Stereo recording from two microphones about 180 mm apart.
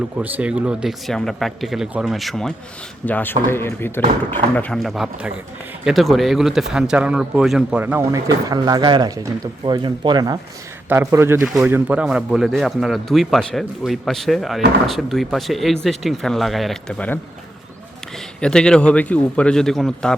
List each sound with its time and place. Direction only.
0.2 s speech: 5° right (ahead or behind); by 10.3 s 25° right (ahead or behind)
10.8 s a man's voice: 15° right (ahead or behind)
11.4 s speech: 5° right (ahead or behind)
18.3 s speech: 5° left (ahead or behind)